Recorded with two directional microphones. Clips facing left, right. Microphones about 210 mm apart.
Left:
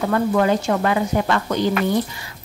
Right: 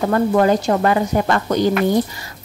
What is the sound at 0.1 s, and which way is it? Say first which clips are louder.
Speech: right 3 dB; 40° right (ahead or behind).